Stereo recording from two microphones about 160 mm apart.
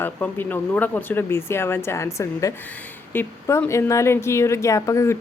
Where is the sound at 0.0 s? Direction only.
10° left (ahead or behind).